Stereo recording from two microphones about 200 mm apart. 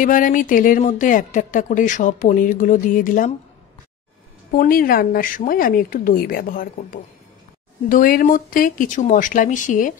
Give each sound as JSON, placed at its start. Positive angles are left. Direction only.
{"t": 0.0, "sound": "speech", "side_deg": 40}
{"t": 4.6, "sound": "speech", "side_deg": 45}